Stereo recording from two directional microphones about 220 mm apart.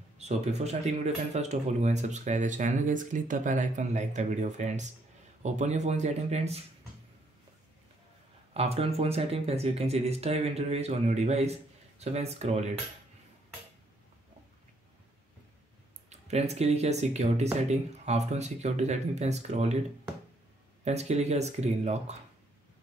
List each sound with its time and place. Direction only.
0.2 s speech: 30° right (ahead or behind)
8.5 s speech: 25° right (ahead or behind)
16.1 s speech: 30° right (ahead or behind)
20.8 s speech: 30° right (ahead or behind)